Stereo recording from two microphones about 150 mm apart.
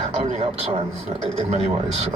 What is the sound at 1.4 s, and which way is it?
Speech, 45° right (ahead or behind).